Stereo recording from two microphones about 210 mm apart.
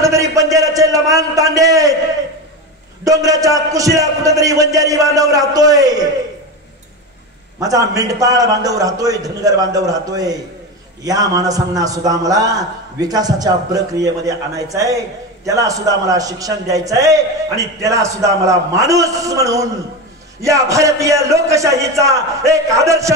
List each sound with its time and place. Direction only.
0.0 s a sound: 15° right (ahead or behind)
3.1 s a man's voice: 15° right (ahead or behind)
7.6 s a man's voice: 15° right (ahead or behind)